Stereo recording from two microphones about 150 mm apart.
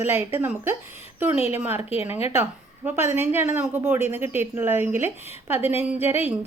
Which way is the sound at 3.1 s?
15° right (ahead or behind).